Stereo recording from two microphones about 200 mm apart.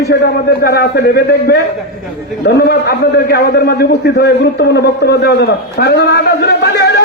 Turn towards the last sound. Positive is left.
turn(degrees=60)  # may be behind; listen again after turning